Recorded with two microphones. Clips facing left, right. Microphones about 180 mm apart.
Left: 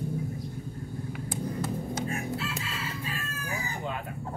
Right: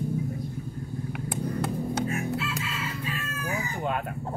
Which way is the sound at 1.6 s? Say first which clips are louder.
Right 3 dB; 65° right (ahead or behind).